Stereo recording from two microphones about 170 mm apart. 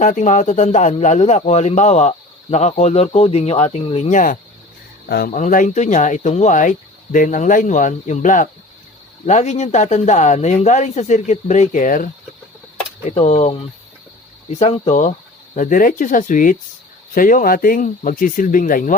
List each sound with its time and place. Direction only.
0.0 s a man's voice: 45° left (ahead or behind)
5.0 s speech: 70° left (ahead or behind)
5.3 s a man's voice: 50° left (ahead or behind)